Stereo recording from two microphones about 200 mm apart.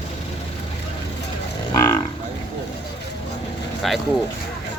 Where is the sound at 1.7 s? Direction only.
15° left (ahead or behind).